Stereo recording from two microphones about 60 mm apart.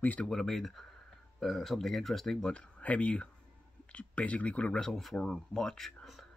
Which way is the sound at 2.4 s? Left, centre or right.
Centre.